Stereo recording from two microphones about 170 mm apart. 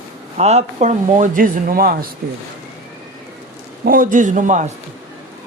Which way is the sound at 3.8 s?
55° right (ahead or behind).